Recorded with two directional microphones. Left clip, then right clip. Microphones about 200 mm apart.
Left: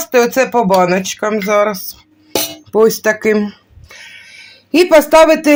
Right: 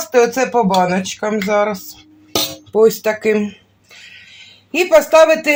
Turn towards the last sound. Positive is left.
turn(degrees=40)  # may be behind; listen again after turning